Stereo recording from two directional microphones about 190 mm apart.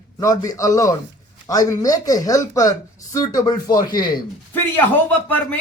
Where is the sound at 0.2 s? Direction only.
15° left (ahead or behind).